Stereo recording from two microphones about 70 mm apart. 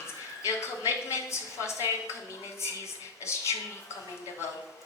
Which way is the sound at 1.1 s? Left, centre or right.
Left.